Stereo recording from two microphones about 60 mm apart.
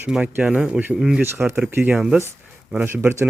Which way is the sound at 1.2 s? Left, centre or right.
Right.